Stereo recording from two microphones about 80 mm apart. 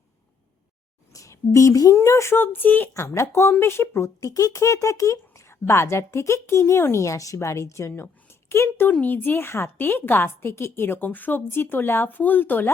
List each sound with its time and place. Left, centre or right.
1.1 s a woman's voice: left
2.9 s speech: left
4.3 s a woman's voice: left
8.9 s a woman's voice: centre